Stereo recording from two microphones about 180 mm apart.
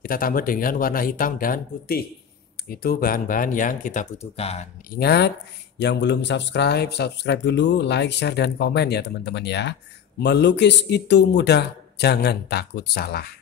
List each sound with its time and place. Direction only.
0.0 s speech: 50° left (ahead or behind); by 4.6 s 35° left (ahead or behind)
4.9 s speech: 65° left (ahead or behind)